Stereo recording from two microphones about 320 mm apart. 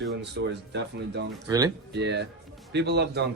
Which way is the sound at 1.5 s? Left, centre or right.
Centre.